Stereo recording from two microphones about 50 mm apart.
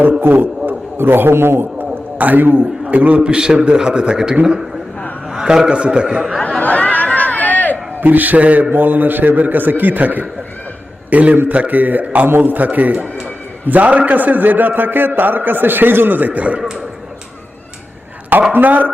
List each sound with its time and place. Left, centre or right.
0.2 s a man's voice: right
2.1 s a man's voice: right
2.9 s a man's voice: right
6.6 s crowd: left
8.0 s a man's voice: right
16.6 s a man's voice: centre
18.5 s a man's voice: right